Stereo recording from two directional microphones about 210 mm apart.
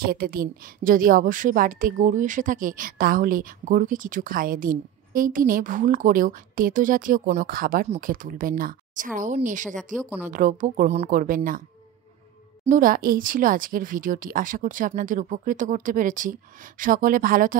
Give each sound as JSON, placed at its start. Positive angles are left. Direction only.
{"t": 0.0, "sound": "a woman's voice", "side_deg": -45}
{"t": 10.0, "sound": "speech", "side_deg": -10}
{"t": 10.3, "sound": "a woman's voice", "side_deg": -40}
{"t": 12.6, "sound": "a woman's voice", "side_deg": -40}